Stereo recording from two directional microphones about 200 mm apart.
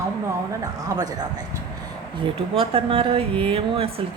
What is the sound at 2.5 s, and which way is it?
Speech, 30° right (ahead or behind).